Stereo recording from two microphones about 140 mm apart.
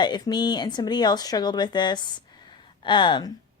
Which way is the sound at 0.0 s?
30° left (ahead or behind).